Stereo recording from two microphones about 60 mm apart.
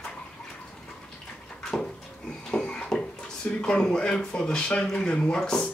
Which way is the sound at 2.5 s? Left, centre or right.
Centre.